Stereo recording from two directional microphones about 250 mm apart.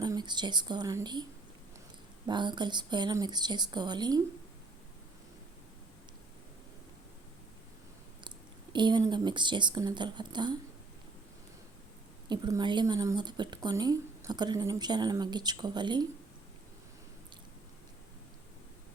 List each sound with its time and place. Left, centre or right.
0.0 s speech: centre
8.7 s speech: centre
12.3 s speech: centre